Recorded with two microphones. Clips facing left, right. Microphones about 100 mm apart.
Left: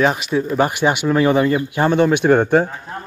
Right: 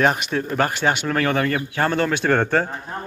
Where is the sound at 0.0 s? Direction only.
Centre (ahead or behind).